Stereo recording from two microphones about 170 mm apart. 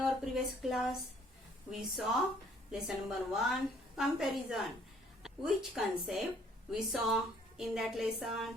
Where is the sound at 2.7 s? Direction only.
Centre (ahead or behind).